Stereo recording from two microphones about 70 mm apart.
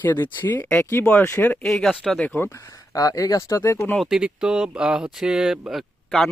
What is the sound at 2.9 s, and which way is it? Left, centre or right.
Speech, left.